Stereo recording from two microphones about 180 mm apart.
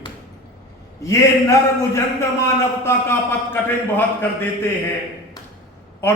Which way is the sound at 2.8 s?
15° left (ahead or behind).